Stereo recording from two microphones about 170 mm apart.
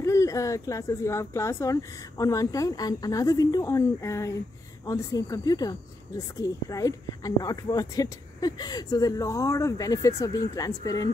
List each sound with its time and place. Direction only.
0.0 s speech: 15° left (ahead or behind)